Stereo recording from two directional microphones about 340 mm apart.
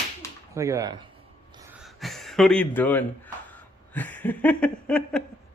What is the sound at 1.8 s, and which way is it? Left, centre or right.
Speech, centre.